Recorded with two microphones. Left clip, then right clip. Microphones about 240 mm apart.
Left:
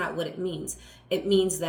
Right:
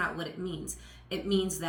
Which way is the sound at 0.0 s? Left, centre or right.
Centre.